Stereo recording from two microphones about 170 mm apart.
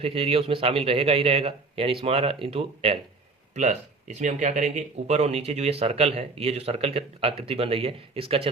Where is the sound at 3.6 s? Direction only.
45° right (ahead or behind).